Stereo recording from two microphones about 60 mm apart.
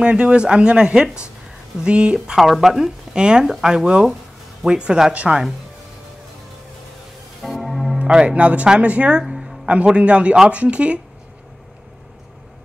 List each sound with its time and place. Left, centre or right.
0.0 s speech: centre
2.3 s speech: centre; by 5.4 s right
7.4 s music: centre
8.0 s speech: centre
9.2 s music: centre
9.7 s speech: centre